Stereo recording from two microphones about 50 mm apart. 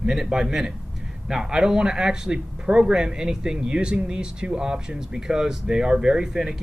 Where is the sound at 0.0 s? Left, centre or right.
Centre.